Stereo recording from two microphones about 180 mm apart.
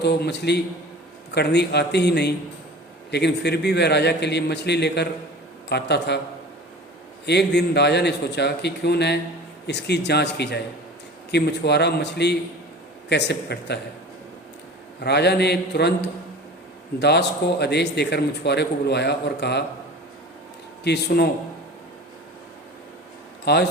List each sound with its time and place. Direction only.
0.0 s a man's voice: 70° left (ahead or behind)
7.3 s a man's voice: 70° left (ahead or behind)
15.0 s a man's voice: 70° left (ahead or behind)
20.8 s a man's voice: 65° left (ahead or behind)
23.5 s a man's voice: 60° left (ahead or behind)